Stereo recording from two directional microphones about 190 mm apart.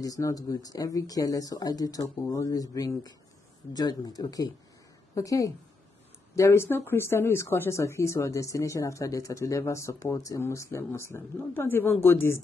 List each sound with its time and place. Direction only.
0.0 s speech: 20° left (ahead or behind)